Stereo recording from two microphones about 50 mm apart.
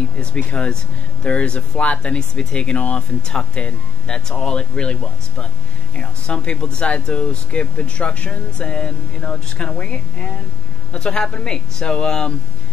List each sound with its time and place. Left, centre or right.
0.2 s speech: left
5.9 s speech: left